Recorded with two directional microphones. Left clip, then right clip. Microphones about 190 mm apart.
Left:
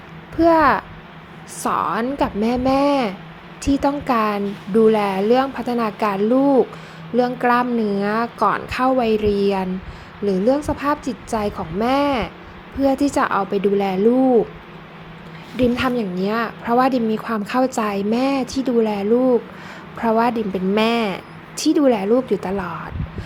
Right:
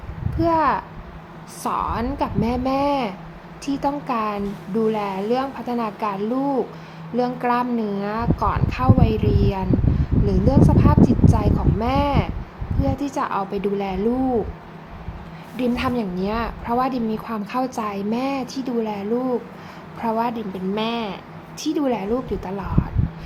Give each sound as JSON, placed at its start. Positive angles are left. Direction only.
{"t": 0.3, "sound": "a woman's voice", "side_deg": 20}
{"t": 15.5, "sound": "a woman's voice", "side_deg": 20}